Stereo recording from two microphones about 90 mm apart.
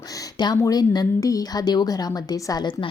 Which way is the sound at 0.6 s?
45° left (ahead or behind).